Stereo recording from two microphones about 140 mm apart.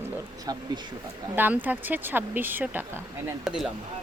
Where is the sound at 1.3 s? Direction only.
15° right (ahead or behind).